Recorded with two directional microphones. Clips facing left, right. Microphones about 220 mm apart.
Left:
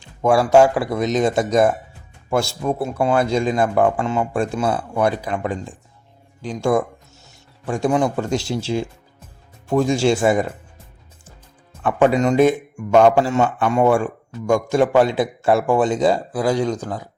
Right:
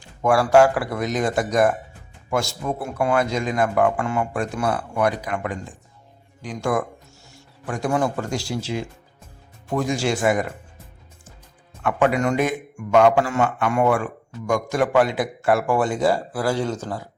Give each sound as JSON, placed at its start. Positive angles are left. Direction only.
{"t": 0.0, "sound": "a man's voice", "side_deg": 20}
{"t": 11.8, "sound": "a man's voice", "side_deg": 30}